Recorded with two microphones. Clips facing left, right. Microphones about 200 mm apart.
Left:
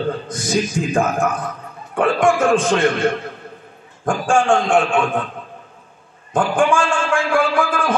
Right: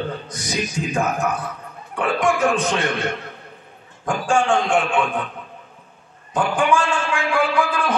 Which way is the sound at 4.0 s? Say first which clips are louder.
Left 3 dB; 50° left (ahead or behind).